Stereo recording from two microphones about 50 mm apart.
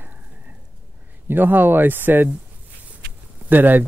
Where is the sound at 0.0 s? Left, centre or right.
Right.